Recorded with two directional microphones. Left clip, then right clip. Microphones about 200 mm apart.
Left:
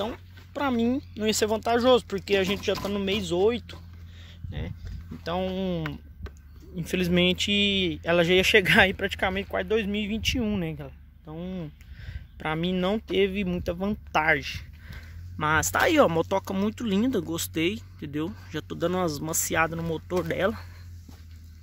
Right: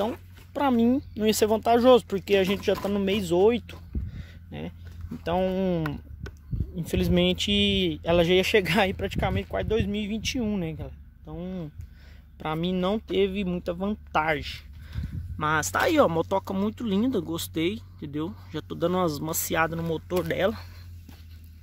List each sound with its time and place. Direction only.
0.0 s speech: 30° right (ahead or behind)
6.7 s speech: 10° right (ahead or behind)